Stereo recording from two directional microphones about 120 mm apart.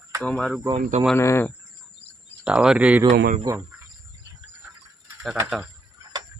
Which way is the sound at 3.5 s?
30° right (ahead or behind).